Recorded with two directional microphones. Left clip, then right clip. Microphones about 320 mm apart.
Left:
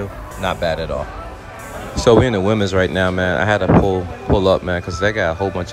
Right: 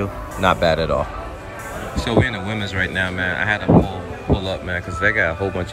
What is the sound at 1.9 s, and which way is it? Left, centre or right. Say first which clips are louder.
Speech: left 7 dB; centre.